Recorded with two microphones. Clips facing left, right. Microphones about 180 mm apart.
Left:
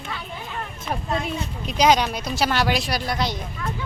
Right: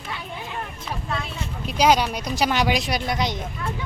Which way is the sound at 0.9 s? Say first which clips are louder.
Left 5 dB; 55° left (ahead or behind).